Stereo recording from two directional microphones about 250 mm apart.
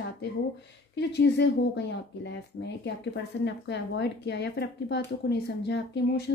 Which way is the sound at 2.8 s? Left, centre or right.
Left.